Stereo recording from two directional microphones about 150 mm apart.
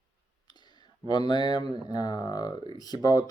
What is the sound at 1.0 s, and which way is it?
Speech, 30° left (ahead or behind).